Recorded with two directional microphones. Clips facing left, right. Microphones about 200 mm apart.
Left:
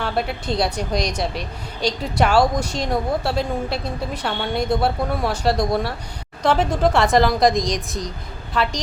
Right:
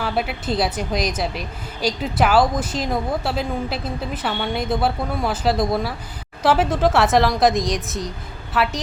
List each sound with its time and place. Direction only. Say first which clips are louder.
0.0 s a woman's voice: even; 5° right (ahead or behind)